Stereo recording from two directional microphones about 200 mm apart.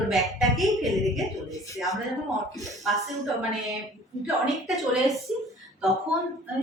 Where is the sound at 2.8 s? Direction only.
Centre (ahead or behind).